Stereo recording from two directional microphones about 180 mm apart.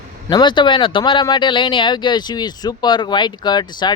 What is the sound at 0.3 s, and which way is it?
Speech, 25° left (ahead or behind).